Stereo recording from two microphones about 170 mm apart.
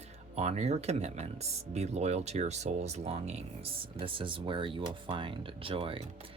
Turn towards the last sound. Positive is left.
turn(degrees=-30)  # may be behind; listen again after turning